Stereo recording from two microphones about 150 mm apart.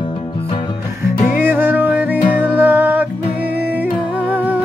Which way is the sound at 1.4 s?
10° right (ahead or behind).